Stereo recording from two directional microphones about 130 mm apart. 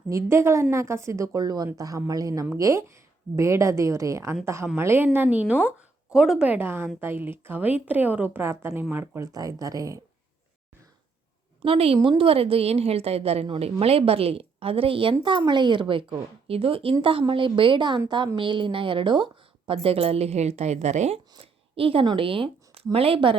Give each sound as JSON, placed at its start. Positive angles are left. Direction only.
{"t": 0.1, "sound": "a woman's voice", "side_deg": -20}
{"t": 11.6, "sound": "a woman's voice", "side_deg": -45}
{"t": 21.3, "sound": "speech", "side_deg": -45}